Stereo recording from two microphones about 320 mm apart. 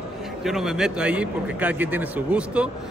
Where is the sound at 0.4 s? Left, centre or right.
Centre.